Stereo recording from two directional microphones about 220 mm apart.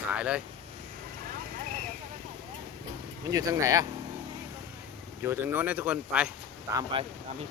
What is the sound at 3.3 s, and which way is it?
Speech, 15° right (ahead or behind).